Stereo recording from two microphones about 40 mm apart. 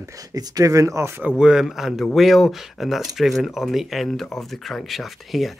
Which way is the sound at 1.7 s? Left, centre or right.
Centre.